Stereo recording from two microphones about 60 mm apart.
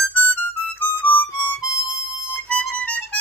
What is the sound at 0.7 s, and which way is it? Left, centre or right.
Harmonica, left.